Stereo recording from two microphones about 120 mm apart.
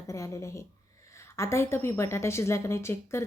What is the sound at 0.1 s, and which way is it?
A woman's voice, 25° left (ahead or behind).